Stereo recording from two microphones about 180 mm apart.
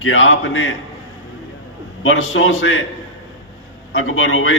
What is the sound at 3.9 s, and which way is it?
Speech, 90° left.